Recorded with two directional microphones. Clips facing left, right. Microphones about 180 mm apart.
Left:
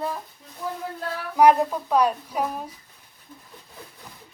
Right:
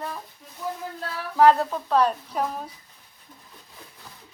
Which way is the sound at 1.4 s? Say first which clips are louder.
Left 1 dB; 15° left (ahead or behind).